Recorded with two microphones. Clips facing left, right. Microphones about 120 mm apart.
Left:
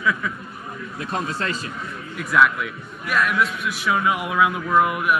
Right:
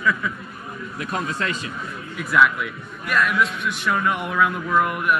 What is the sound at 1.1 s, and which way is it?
Speech, 35° left (ahead or behind).